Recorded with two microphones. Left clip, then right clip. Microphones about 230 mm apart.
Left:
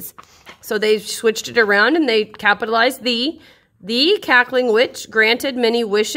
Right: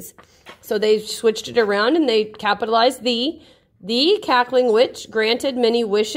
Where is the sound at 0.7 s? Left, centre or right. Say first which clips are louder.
Left 1 dB; centre.